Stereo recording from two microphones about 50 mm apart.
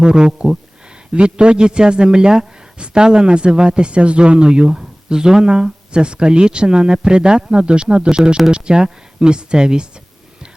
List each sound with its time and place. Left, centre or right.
0.0 s a man's voice: centre